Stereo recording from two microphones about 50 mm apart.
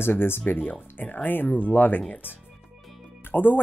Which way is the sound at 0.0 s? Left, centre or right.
Left.